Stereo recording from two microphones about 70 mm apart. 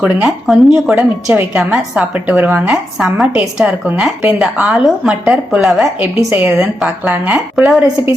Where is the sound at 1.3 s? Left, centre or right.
Right.